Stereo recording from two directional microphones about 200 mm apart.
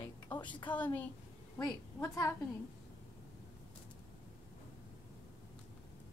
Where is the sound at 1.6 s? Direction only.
5° left (ahead or behind).